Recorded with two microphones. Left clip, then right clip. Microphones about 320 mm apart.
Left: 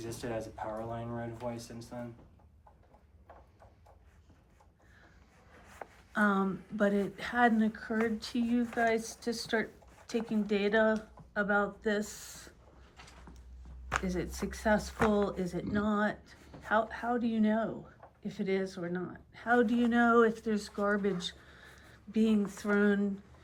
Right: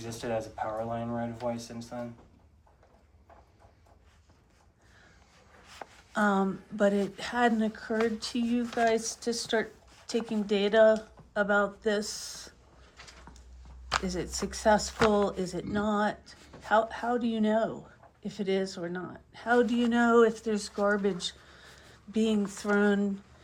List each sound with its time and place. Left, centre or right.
0.0 s speech: right
5.6 s speech: centre
13.9 s speech: centre